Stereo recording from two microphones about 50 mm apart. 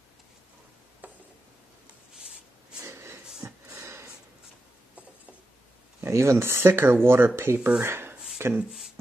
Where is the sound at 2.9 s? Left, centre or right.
Right.